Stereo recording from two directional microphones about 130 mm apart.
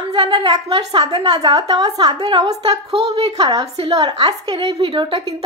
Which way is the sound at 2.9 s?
55° right (ahead or behind).